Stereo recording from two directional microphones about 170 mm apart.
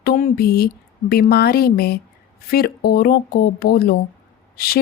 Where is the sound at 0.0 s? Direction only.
60° left (ahead or behind).